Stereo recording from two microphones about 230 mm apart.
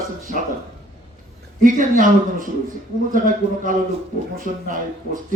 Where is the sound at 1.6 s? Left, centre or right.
Right.